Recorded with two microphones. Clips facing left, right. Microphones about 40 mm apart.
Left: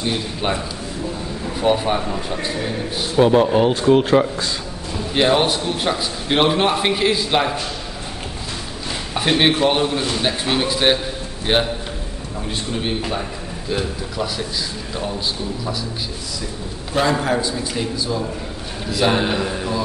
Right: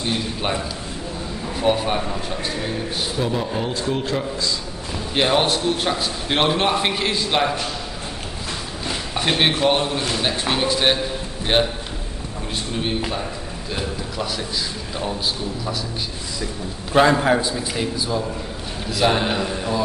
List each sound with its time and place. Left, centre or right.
0.0 s a man's voice: centre
1.6 s a man's voice: centre
3.2 s a man's voice: left
4.9 s a man's voice: centre
9.1 s a man's voice: centre
13.7 s a man's voice: centre
17.1 s a man's voice: centre
18.9 s a man's voice: centre